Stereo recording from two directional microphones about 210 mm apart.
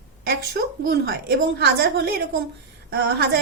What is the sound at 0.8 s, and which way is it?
A woman's voice, 45° right (ahead or behind).